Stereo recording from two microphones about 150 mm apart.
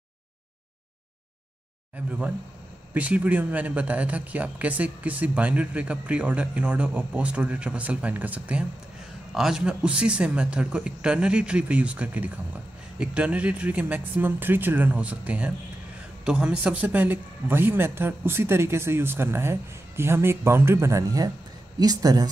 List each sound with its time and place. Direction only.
2.0 s a man's voice: 10° right (ahead or behind); by 22.3 s 25° right (ahead or behind)